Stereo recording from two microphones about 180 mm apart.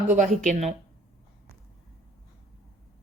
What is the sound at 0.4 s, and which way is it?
Speech, 40° right (ahead or behind).